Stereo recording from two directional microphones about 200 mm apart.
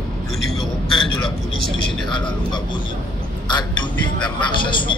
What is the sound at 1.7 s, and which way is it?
Speech, 25° left (ahead or behind).